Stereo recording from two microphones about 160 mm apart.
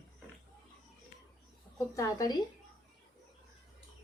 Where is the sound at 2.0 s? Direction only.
20° left (ahead or behind).